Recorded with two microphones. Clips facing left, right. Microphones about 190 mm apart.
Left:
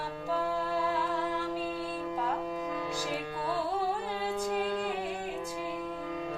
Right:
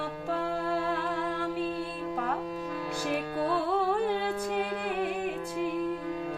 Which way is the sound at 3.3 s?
55° right (ahead or behind).